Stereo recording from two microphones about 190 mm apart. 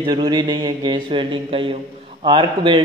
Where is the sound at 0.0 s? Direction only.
25° right (ahead or behind).